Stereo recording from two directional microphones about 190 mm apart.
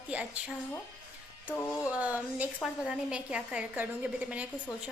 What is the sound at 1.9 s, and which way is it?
A woman's voice, 5° right (ahead or behind).